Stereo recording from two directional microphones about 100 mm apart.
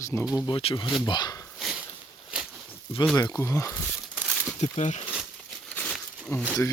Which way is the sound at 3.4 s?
30° left (ahead or behind).